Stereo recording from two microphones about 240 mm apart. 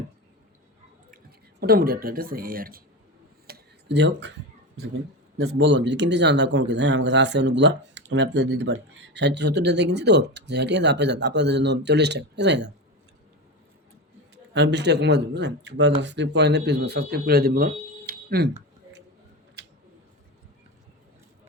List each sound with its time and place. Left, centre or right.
1.1 s speech: right
3.4 s a sound: right
5.5 s speech: right
14.5 s speech: right